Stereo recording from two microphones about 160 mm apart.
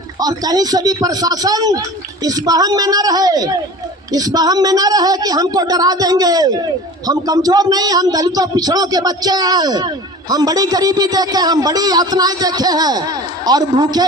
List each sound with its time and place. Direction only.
0.2 s a man's voice: 25° right (ahead or behind)